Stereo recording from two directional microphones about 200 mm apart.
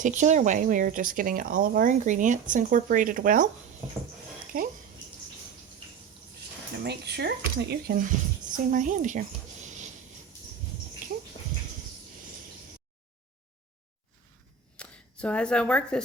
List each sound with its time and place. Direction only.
0.0 s speech: 35° right (ahead or behind)
4.5 s speech: 45° right (ahead or behind)
6.8 s speech: 55° right (ahead or behind); by 9.2 s 40° right (ahead or behind)
9.6 s a sound: 35° right (ahead or behind)
14.8 s speech: 5° left (ahead or behind)